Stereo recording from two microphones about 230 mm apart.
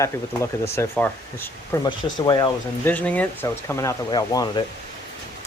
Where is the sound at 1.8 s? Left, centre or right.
Centre.